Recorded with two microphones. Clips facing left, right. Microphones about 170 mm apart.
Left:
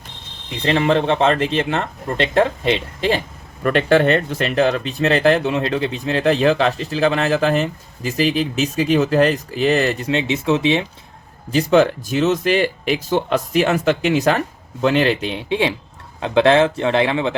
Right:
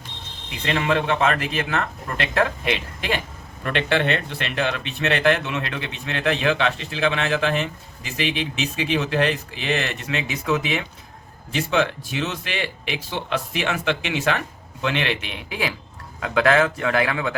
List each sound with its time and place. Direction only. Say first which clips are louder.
0.6 s speech: left 6 dB; 30° left (ahead or behind)
3.6 s speech: left 7 dB; 45° left (ahead or behind)
11.5 s speech: left 8 dB; 40° left (ahead or behind)